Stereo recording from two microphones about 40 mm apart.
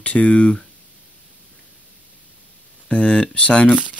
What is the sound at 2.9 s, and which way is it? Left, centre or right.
Speech, left.